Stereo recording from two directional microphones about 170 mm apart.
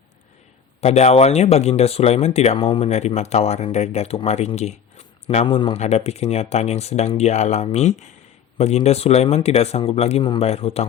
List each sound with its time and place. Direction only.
0.8 s speech: 40° left (ahead or behind)